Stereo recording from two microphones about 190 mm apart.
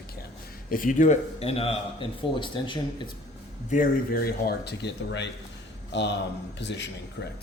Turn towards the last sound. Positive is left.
turn(degrees=65)  # may be behind; listen again after turning